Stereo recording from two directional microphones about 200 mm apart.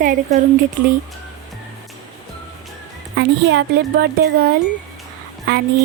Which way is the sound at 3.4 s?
60° right (ahead or behind).